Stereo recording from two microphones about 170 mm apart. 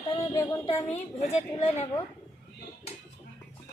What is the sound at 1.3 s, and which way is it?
Speech, 35° left (ahead or behind).